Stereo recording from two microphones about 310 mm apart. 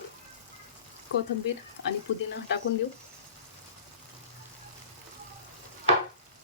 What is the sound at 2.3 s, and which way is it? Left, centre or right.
Speech, left.